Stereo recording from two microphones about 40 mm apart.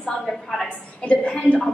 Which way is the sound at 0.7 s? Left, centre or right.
Left.